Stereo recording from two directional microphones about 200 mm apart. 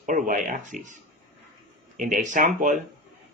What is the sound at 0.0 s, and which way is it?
Speech, 40° right (ahead or behind).